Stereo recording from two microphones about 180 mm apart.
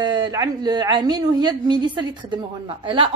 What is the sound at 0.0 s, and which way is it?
A woman's voice, 25° right (ahead or behind).